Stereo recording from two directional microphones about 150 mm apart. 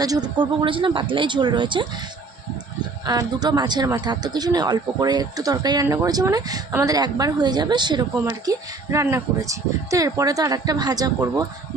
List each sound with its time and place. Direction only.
0.0 s speech: 25° right (ahead or behind)
3.1 s speech: 25° right (ahead or behind)